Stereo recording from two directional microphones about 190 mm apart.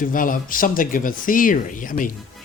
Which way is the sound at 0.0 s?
45° left (ahead or behind).